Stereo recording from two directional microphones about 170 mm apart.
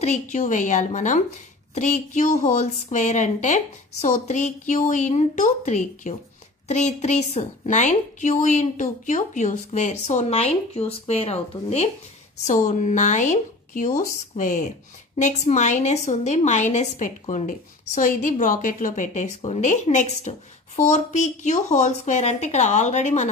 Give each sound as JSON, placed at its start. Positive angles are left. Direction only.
{"t": 0.0, "sound": "a woman's voice", "side_deg": 45}